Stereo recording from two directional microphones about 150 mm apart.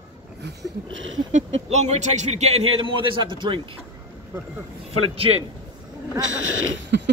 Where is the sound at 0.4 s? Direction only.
90° right.